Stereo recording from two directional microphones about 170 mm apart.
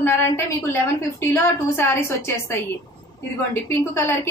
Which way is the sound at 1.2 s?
15° left (ahead or behind).